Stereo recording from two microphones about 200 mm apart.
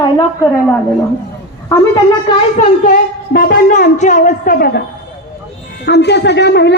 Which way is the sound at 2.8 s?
45° left (ahead or behind).